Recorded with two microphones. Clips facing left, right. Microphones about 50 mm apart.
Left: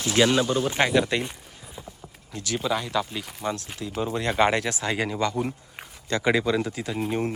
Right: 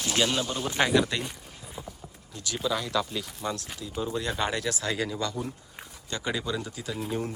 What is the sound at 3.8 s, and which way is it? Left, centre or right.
Speech, left.